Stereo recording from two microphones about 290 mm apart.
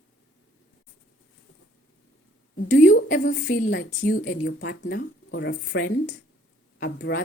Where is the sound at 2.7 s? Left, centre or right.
Left.